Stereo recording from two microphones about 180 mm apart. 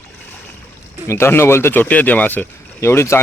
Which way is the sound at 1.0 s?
15° left (ahead or behind).